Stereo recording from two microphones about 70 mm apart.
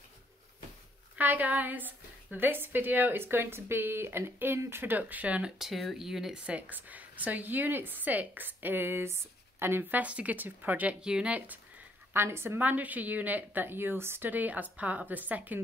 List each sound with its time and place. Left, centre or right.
1.1 s a woman's voice: right
5.6 s speech: centre
6.4 s a woman's voice: right
12.1 s a woman's voice: right
12.5 s a woman's voice: right